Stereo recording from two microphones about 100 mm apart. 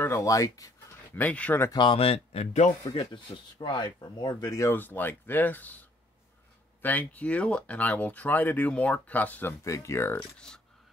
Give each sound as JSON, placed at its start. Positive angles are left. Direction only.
{"t": 0.0, "sound": "speech", "side_deg": 30}
{"t": 1.1, "sound": "speech", "side_deg": 15}
{"t": 1.7, "sound": "speech", "side_deg": 55}
{"t": 3.1, "sound": "speech", "side_deg": 50}
{"t": 4.7, "sound": "speech", "side_deg": 20}
{"t": 9.7, "sound": "speech", "side_deg": 30}